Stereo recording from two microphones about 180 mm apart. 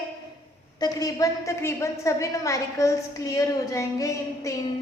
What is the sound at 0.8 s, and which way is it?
A woman's voice, 20° left (ahead or behind).